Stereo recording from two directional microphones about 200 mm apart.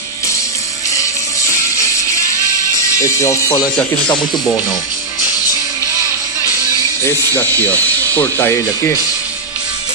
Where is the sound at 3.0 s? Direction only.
15° left (ahead or behind).